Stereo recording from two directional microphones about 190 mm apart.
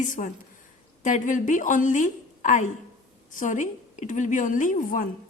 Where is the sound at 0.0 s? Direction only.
45° left (ahead or behind).